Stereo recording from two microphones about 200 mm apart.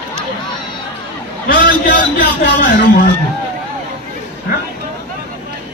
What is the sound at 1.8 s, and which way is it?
Speech, 40° left (ahead or behind).